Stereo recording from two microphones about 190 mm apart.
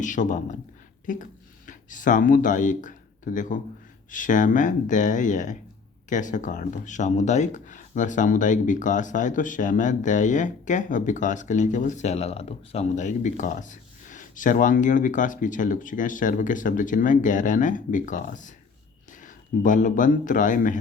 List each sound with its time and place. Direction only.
0.0 s speech: 40° left (ahead or behind)